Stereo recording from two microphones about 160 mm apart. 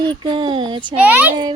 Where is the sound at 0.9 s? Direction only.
10° right (ahead or behind).